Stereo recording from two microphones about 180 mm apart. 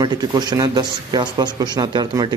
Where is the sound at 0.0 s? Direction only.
25° right (ahead or behind).